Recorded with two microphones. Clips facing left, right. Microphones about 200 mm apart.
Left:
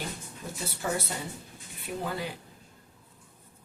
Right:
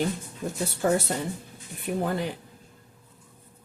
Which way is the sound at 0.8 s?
50° right (ahead or behind).